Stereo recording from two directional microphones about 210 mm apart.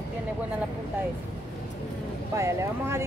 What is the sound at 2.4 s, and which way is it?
Speech, 15° right (ahead or behind).